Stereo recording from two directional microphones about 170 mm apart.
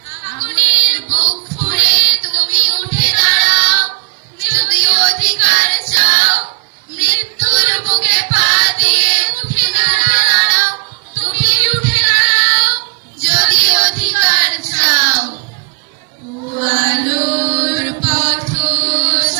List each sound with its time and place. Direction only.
0.3 s female singing: 55° left (ahead or behind)
4.4 s singing: 55° left (ahead or behind)
6.9 s child singing: 55° left (ahead or behind)
13.2 s singing: 55° left (ahead or behind)
16.6 s chant: 50° left (ahead or behind)